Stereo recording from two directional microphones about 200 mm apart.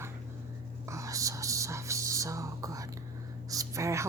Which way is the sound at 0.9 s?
15° right (ahead or behind).